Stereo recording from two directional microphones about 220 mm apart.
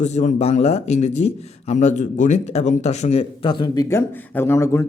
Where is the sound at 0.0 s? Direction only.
30° left (ahead or behind).